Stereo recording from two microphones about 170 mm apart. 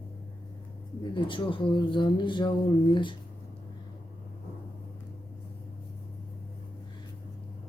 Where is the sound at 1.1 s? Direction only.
30° left (ahead or behind).